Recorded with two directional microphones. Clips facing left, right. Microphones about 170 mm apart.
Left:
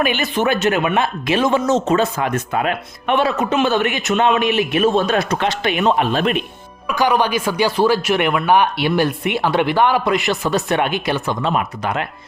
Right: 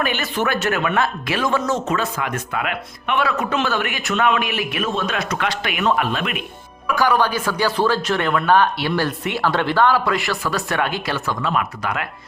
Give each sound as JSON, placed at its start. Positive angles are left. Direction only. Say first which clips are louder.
{"t": 0.0, "sound": "speech", "louder": "left 4 dB", "side_deg": 15}
{"t": 6.1, "sound": "speech", "louder": "left 7 dB", "side_deg": 35}
{"t": 6.8, "sound": "speech", "louder": "left 1 dB", "side_deg": 20}